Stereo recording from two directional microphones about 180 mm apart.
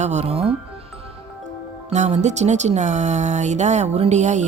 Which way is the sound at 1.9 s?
40° right (ahead or behind).